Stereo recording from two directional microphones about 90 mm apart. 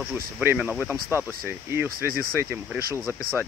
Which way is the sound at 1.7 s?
30° right (ahead or behind).